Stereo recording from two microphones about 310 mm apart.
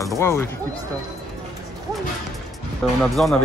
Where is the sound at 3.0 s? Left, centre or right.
Centre.